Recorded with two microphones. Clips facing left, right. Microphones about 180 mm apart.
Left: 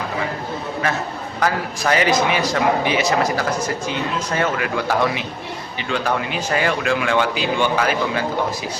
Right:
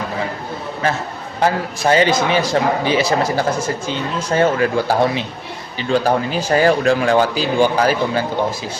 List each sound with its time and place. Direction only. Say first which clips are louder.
1.4 s a man's voice: right 4 dB; 30° right (ahead or behind)